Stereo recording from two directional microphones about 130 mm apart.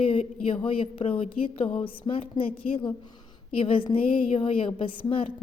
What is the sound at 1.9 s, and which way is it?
A woman's voice, 40° left (ahead or behind).